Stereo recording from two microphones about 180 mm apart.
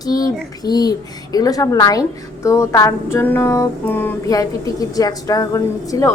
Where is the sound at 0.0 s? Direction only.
20° left (ahead or behind).